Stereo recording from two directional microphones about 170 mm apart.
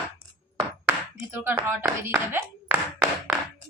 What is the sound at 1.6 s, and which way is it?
Speech, 10° right (ahead or behind).